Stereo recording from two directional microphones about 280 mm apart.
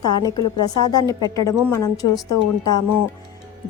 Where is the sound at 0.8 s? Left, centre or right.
Centre.